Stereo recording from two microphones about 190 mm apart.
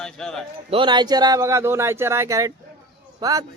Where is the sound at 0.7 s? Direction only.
25° right (ahead or behind).